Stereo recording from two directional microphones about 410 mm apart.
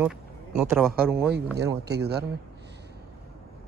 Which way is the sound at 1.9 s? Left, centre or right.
Right.